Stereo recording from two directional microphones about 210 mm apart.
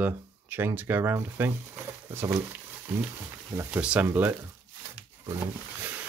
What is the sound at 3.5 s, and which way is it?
Speech, 10° right (ahead or behind).